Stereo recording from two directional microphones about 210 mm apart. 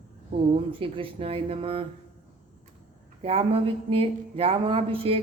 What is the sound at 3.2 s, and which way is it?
A man's voice, 25° right (ahead or behind).